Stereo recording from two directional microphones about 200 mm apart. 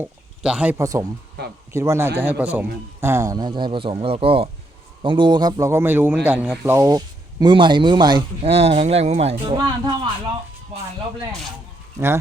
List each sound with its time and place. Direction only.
0.0 s speech: 5° right (ahead or behind); by 9.3 s 30° right (ahead or behind)
9.5 s speech: 20° right (ahead or behind)
11.9 s speech: 15° right (ahead or behind)